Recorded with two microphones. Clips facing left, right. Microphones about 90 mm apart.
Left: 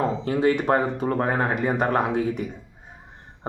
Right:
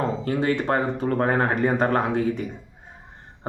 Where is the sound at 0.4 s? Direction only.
25° left (ahead or behind).